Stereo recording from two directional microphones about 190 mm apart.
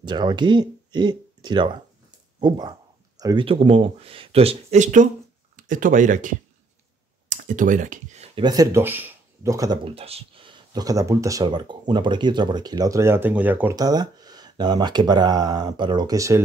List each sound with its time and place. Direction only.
0.0 s speech: 25° right (ahead or behind); by 6.3 s 40° right (ahead or behind)
7.2 s a sound: 45° right (ahead or behind)
8.4 s speech: 20° right (ahead or behind)
9.9 s speech: 30° right (ahead or behind); by 13.7 s 10° right (ahead or behind)
13.7 s speech: 20° right (ahead or behind)